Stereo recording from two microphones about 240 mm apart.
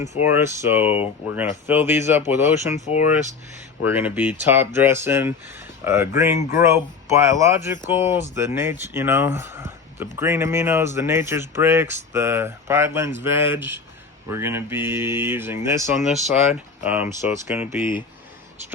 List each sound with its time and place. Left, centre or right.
0.0 s speech: left
0.3 s speech: centre
2.7 s speech: left
3.8 s speech: centre